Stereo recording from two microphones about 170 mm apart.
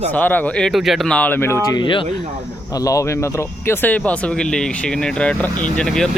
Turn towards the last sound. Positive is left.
turn(degrees=5)  # may be behind; listen again after turning